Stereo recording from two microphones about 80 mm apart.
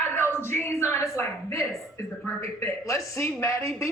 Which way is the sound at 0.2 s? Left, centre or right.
Left.